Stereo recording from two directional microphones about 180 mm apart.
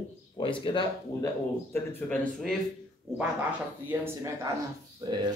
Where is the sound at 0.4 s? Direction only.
25° left (ahead or behind).